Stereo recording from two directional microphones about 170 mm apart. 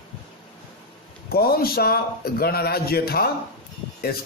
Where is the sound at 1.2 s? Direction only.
65° left (ahead or behind).